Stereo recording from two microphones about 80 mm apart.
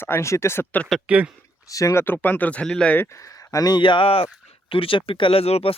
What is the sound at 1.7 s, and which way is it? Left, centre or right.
Speech, left.